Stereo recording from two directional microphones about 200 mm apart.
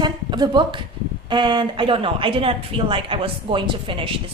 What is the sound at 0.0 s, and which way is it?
A woman's voice, 20° right (ahead or behind).